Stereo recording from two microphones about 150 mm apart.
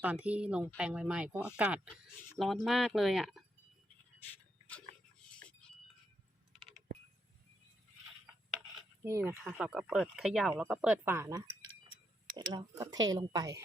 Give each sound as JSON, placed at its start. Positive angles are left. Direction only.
{"t": 0.0, "sound": "speech", "side_deg": -10}
{"t": 6.6, "sound": "a sound", "side_deg": 0}
{"t": 9.0, "sound": "speech", "side_deg": -20}
{"t": 9.5, "sound": "speech", "side_deg": -5}
{"t": 11.0, "sound": "speech", "side_deg": -15}
{"t": 12.5, "sound": "speech", "side_deg": -25}